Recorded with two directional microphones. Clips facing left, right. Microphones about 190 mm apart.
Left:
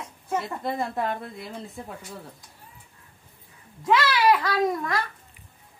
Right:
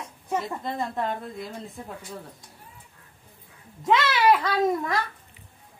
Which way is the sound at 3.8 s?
20° right (ahead or behind).